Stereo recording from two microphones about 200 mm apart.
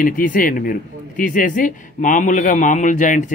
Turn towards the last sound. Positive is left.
turn(degrees=40)  # may be behind; listen again after turning